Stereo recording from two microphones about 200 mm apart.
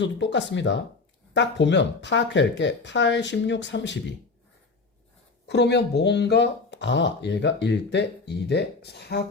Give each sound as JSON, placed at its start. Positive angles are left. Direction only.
{"t": 0.0, "sound": "speech", "side_deg": 65}
{"t": 5.5, "sound": "speech", "side_deg": 60}